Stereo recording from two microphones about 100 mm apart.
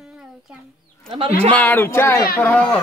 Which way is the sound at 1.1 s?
70° right (ahead or behind).